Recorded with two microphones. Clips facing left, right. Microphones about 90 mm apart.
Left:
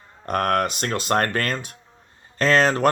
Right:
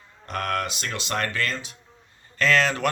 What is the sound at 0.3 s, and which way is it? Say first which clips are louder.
Speech: left 6 dB; 50° left (ahead or behind).